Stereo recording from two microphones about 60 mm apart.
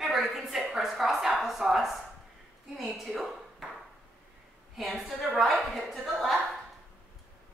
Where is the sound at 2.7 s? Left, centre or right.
Centre.